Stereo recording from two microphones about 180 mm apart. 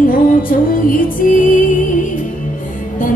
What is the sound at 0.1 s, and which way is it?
Music, 50° left (ahead or behind).